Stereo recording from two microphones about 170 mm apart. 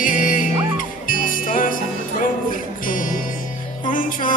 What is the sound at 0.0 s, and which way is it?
Music, 50° left (ahead or behind).